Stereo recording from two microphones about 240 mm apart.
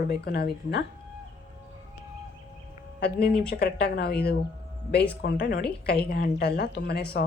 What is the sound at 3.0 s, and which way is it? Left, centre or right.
Speech, left.